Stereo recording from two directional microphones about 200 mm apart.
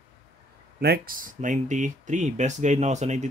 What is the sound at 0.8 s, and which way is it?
Speech, 50° right (ahead or behind).